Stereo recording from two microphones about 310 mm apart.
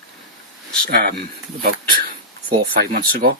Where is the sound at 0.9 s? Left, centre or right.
Right.